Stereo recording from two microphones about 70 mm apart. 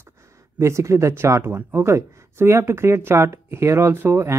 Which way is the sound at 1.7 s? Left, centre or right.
Right.